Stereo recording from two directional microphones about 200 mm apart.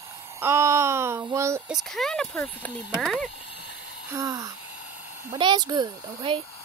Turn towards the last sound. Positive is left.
turn(degrees=-25)  # may be behind; listen again after turning